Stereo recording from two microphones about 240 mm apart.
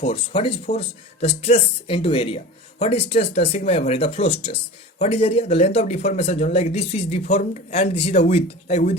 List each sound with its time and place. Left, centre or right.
0.0 s speech: left